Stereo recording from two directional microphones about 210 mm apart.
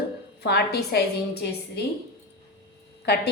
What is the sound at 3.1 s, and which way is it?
Speech, 50° left (ahead or behind).